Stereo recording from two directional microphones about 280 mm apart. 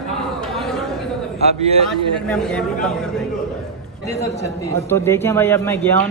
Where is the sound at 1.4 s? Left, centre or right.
Right.